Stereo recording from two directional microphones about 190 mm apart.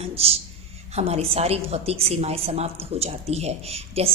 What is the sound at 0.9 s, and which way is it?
A woman's voice, 35° right (ahead or behind).